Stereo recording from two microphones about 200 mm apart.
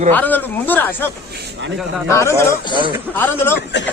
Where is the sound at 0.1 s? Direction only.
10° left (ahead or behind).